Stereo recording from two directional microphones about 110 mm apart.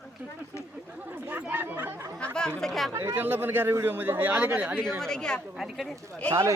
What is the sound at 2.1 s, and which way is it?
Speech, 5° left (ahead or behind).